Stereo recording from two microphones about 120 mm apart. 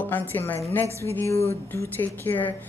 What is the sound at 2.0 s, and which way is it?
Speech, 15° left (ahead or behind).